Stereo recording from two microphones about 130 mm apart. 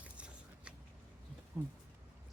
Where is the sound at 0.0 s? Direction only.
10° right (ahead or behind).